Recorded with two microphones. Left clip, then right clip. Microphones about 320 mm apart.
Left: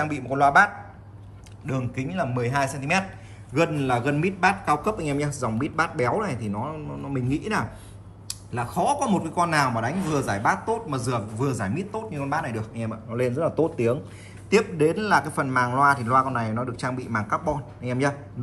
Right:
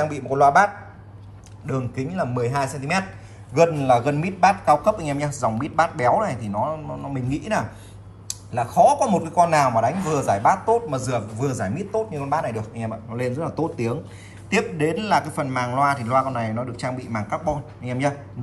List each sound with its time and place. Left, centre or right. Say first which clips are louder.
0.0 s a man's voice: right 4 dB; centre
1.7 s a man's voice: right 3 dB; centre
3.8 s a man's voice: right 5 dB; centre